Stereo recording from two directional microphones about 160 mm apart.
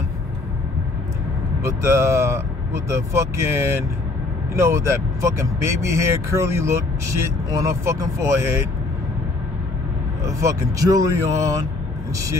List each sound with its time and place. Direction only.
1.6 s speech: 15° right (ahead or behind)
10.2 s speech: 20° right (ahead or behind)